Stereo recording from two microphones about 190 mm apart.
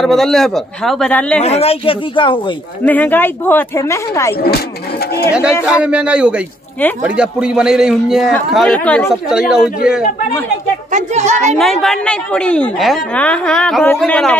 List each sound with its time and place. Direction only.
0.0 s a man's voice: centre (ahead or behind)
1.4 s speech: 30° left (ahead or behind)
2.8 s a woman's voice: 10° left (ahead or behind)
5.7 s a man's voice: 5° right (ahead or behind)
10.9 s a woman's voice: 40° right (ahead or behind)
11.5 s a man's voice: centre (ahead or behind)